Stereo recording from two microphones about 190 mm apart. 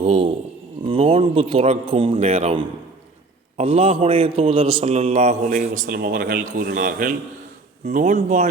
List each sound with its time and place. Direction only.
0.0 s a man's voice: 30° right (ahead or behind)